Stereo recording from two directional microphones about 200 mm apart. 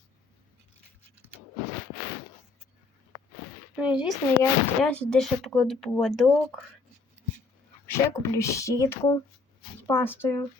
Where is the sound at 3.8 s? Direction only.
5° right (ahead or behind).